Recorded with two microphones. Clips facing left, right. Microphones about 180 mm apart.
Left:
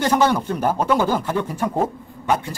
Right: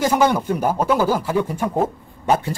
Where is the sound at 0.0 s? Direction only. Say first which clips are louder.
Right 1 dB; 10° right (ahead or behind).